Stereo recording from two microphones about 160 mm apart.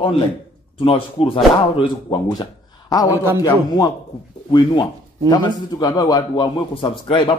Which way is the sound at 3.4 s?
25° left (ahead or behind).